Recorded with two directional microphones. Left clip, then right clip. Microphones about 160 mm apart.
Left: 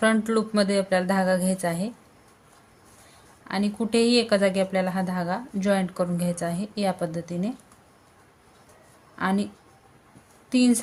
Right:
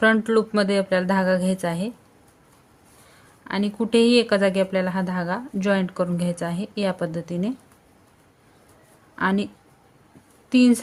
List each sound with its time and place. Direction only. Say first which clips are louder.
0.0 s speech: right 4 dB; 30° right (ahead or behind)
3.4 s speech: right 2 dB; 30° right (ahead or behind)
9.1 s speech: right 3 dB; 30° right (ahead or behind)
10.5 s speech: right 4 dB; 30° right (ahead or behind)